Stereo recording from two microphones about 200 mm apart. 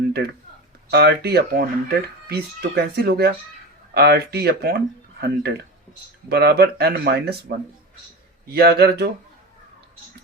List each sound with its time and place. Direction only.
0.9 s speech: 55° right (ahead or behind)